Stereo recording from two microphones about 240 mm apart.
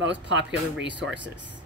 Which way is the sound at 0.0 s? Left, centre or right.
Right.